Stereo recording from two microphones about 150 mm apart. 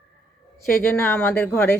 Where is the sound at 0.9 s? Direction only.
15° left (ahead or behind).